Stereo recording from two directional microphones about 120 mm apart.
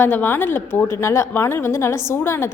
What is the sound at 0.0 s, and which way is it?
A woman's voice, 15° left (ahead or behind).